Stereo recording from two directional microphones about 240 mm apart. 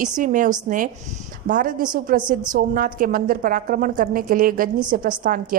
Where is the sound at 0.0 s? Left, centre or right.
Right.